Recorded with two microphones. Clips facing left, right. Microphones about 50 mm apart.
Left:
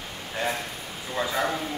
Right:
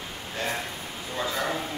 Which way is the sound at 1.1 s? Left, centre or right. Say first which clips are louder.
Left 3 dB; centre.